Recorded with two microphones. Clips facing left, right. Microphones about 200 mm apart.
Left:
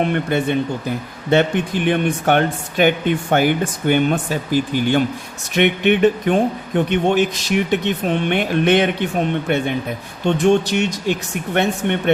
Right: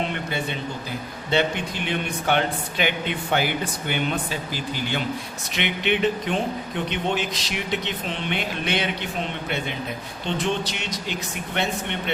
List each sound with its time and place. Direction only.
0.0 s speech: 55° left (ahead or behind)